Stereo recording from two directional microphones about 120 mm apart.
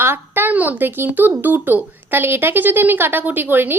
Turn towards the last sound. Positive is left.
turn(degrees=-15)  # may be behind; listen again after turning